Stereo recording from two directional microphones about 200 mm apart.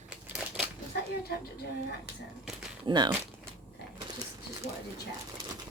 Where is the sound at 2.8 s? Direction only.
25° right (ahead or behind).